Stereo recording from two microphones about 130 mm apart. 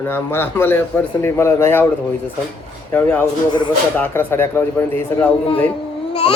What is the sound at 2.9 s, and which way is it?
A man's voice, 15° left (ahead or behind).